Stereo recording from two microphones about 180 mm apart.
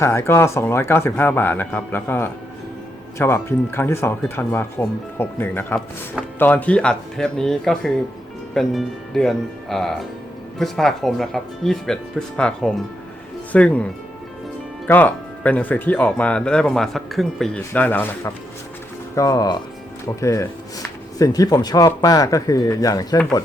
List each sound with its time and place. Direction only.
0.0 s speech: 15° left (ahead or behind)
14.8 s speech: 10° left (ahead or behind)